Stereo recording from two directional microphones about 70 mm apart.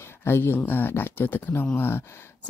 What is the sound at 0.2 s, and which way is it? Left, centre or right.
Speech, left.